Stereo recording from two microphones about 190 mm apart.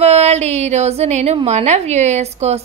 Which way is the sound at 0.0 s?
35° right (ahead or behind).